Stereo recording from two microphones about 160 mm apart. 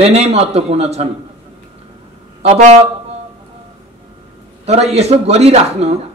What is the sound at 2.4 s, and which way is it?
Speech, 40° right (ahead or behind).